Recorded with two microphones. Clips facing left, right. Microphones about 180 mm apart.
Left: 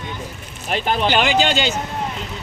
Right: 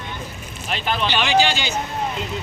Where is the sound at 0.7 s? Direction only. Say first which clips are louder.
Left 4 dB; 50° left (ahead or behind).